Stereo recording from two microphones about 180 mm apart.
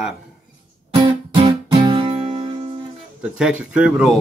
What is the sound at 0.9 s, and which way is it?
Music, 20° right (ahead or behind).